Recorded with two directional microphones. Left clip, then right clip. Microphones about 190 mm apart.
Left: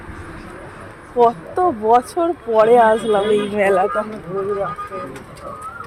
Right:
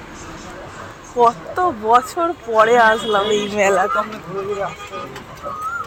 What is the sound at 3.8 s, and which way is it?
Speech, 35° left (ahead or behind).